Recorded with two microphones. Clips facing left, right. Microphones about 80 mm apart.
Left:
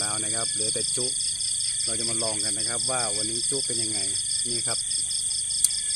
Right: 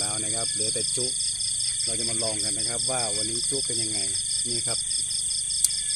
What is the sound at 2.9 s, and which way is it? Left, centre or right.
Speech, left.